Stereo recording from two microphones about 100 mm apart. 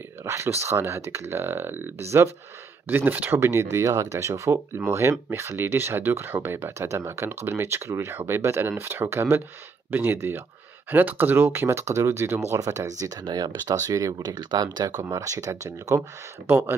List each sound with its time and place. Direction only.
0.2 s speech: 25° right (ahead or behind)